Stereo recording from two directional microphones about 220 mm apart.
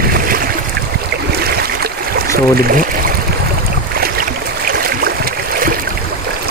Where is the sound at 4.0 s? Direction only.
40° right (ahead or behind).